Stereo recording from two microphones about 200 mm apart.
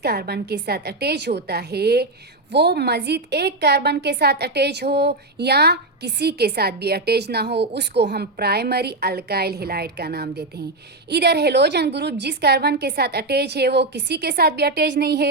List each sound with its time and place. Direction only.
0.0 s a woman's voice: 55° right (ahead or behind)